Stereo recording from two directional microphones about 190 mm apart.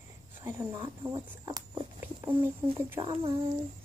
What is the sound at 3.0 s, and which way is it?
Female singing, 30° right (ahead or behind).